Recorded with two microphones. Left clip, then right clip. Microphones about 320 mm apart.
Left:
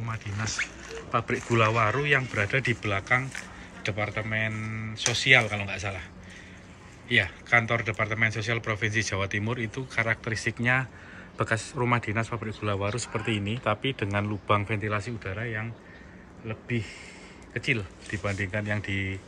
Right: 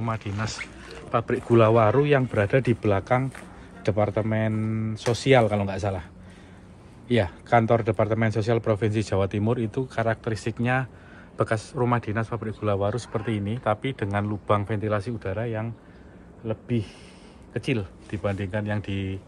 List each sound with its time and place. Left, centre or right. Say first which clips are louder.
0.0 s speech: right 4 dB; centre
4.6 s speech: right 5 dB; right
4.9 s speech: even; centre
7.1 s speech: right 1 dB; centre